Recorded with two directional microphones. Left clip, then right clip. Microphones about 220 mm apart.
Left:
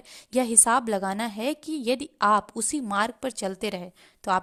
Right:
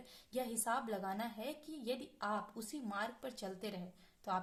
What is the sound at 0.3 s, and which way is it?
A woman's voice, 40° left (ahead or behind).